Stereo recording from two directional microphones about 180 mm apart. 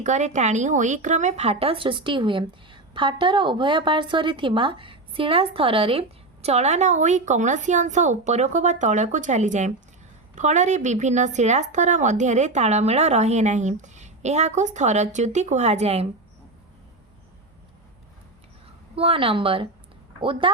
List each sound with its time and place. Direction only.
0.0 s a woman's voice: 40° right (ahead or behind)
18.9 s a woman's voice: 30° right (ahead or behind)